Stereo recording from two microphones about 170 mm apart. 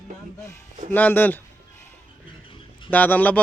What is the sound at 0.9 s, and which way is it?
Speech, 10° left (ahead or behind).